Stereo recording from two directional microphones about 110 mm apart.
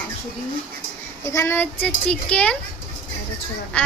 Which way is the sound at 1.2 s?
25° left (ahead or behind).